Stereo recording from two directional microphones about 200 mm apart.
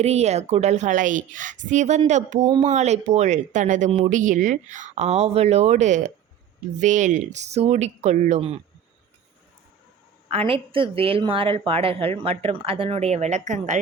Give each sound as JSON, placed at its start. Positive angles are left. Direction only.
{"t": 0.0, "sound": "a woman's voice", "side_deg": -35}
{"t": 10.2, "sound": "a woman's voice", "side_deg": -30}